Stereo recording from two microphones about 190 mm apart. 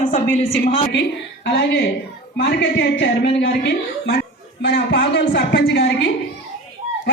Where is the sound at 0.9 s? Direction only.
65° left (ahead or behind).